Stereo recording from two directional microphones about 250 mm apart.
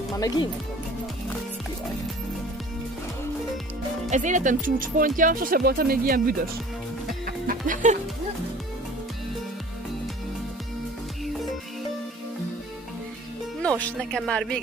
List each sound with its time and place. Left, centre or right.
0.2 s speech: centre
4.1 s speech: right
7.2 s music: right
13.6 s speech: centre